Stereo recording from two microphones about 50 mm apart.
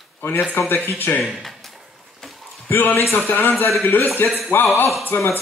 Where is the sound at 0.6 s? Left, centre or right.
Left.